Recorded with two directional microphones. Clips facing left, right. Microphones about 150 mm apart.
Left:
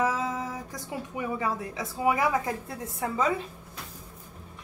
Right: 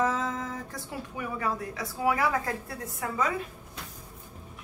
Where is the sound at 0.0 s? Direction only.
10° left (ahead or behind).